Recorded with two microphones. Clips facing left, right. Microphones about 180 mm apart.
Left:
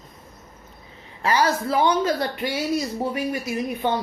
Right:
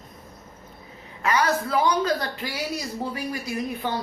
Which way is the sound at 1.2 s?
30° left (ahead or behind).